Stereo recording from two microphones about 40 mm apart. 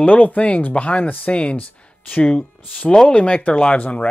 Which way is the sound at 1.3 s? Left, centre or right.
Left.